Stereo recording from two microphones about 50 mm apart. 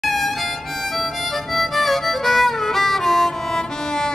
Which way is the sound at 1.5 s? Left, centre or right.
Centre.